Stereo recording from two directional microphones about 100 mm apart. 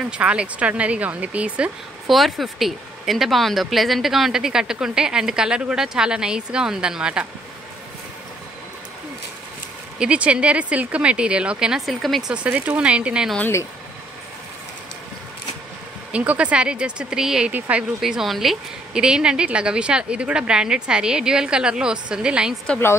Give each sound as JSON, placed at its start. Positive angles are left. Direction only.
{"t": 0.0, "sound": "a woman's voice", "side_deg": -10}
{"t": 2.0, "sound": "speech", "side_deg": 0}
{"t": 9.9, "sound": "a woman's voice", "side_deg": -10}
{"t": 12.3, "sound": "a woman's voice", "side_deg": -15}
{"t": 16.1, "sound": "a woman's voice", "side_deg": -10}
{"t": 18.0, "sound": "a woman's voice", "side_deg": 0}